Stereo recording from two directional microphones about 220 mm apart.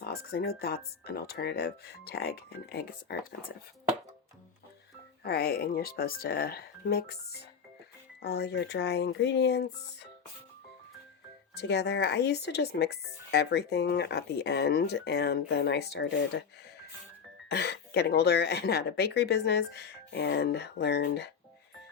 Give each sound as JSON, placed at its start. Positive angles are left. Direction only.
{"t": 0.0, "sound": "speech", "side_deg": 45}
{"t": 5.2, "sound": "speech", "side_deg": 45}
{"t": 11.5, "sound": "speech", "side_deg": 50}
{"t": 17.5, "sound": "speech", "side_deg": 50}